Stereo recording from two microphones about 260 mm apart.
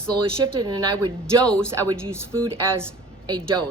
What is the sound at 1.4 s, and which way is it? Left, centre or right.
Speech, centre.